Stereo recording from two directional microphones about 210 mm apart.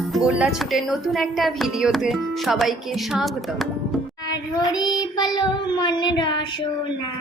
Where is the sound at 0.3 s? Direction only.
5° right (ahead or behind).